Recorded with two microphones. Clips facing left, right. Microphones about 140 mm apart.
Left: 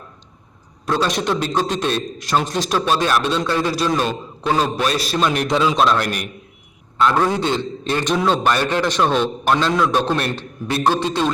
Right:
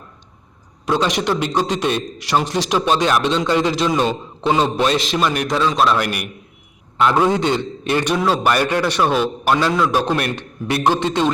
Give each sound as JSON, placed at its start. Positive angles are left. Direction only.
{"t": 0.9, "sound": "a man's voice", "side_deg": -15}
{"t": 5.2, "sound": "a man's voice", "side_deg": -5}
{"t": 8.1, "sound": "a man's voice", "side_deg": -5}